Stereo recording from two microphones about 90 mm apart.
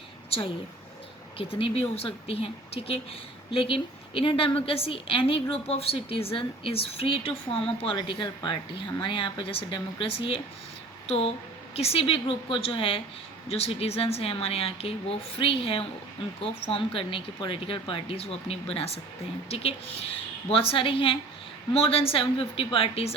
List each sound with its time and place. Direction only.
0.3 s a woman's voice: 90° left
7.9 s speech: 60° left (ahead or behind); by 10.4 s 90° left
11.9 s a woman's voice: 90° left